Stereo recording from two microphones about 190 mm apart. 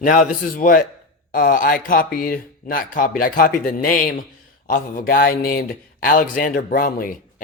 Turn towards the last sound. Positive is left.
turn(degrees=45)  # may be behind; listen again after turning